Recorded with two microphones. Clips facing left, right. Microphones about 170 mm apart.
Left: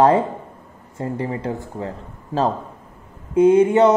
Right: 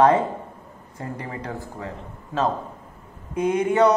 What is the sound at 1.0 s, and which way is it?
Speech, 30° left (ahead or behind).